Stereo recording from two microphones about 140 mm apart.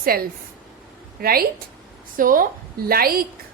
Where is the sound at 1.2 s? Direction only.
90° right.